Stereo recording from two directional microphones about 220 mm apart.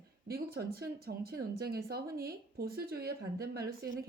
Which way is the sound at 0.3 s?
45° right (ahead or behind).